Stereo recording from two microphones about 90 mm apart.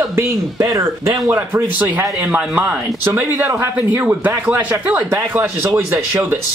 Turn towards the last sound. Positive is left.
turn(degrees=-30)  # may be behind; listen again after turning